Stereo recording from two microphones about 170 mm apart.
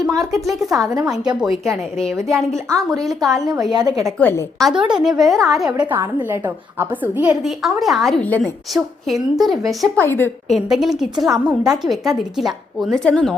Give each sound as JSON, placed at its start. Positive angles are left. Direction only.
{"t": 0.4, "sound": "a woman's voice", "side_deg": 0}
{"t": 2.6, "sound": "a woman's voice", "side_deg": -20}
{"t": 3.0, "sound": "a woman's voice", "side_deg": 0}
{"t": 3.7, "sound": "a woman's voice", "side_deg": -25}
{"t": 4.0, "sound": "a woman's voice", "side_deg": 10}
{"t": 4.6, "sound": "a woman's voice", "side_deg": -5}
{"t": 5.8, "sound": "a woman's voice", "side_deg": -10}
{"t": 10.0, "sound": "a woman's voice", "side_deg": 10}
{"t": 10.5, "sound": "a woman's voice", "side_deg": 0}